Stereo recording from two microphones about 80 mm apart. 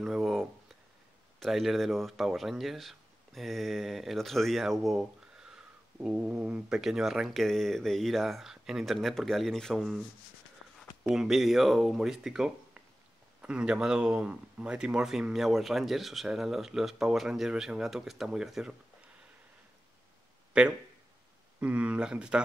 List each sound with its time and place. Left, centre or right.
0.0 s a sound: centre
1.4 s speech: centre
6.8 s speech: centre
11.1 s speech: centre
20.5 s speech: centre